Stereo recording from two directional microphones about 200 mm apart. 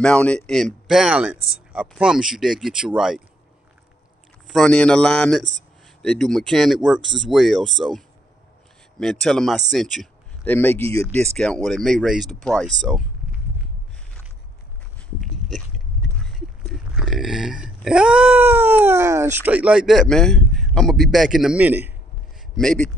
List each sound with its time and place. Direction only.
0.0 s a man's voice: 5° left (ahead or behind)
4.5 s a man's voice: 5° left (ahead or behind)
9.0 s a man's voice: centre (ahead or behind)
10.8 s speech: 30° right (ahead or behind)
11.3 s a man's voice: 5° left (ahead or behind)
16.0 s burping: centre (ahead or behind)
19.4 s a man's voice: 5° right (ahead or behind)
22.6 s a man's voice: 5° left (ahead or behind)